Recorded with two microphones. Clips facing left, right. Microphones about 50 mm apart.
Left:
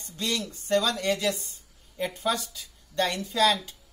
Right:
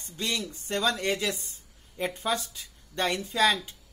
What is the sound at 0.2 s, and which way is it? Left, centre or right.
A woman's voice, right.